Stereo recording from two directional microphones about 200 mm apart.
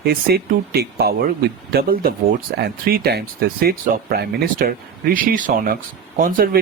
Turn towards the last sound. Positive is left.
turn(degrees=-45)  # may be behind; listen again after turning